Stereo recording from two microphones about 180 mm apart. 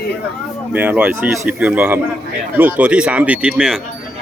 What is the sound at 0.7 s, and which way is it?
Speech, 10° right (ahead or behind).